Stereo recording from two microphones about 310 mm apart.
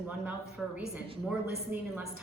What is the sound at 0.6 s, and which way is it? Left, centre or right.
A woman's voice, centre.